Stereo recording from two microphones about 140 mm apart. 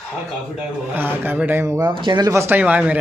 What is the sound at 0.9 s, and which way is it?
Speech, 15° right (ahead or behind).